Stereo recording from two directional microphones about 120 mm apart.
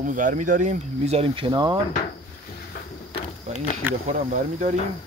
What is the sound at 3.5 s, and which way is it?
Speech, 65° right (ahead or behind).